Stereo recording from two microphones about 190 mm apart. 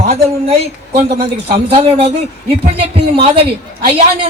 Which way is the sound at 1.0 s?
30° right (ahead or behind).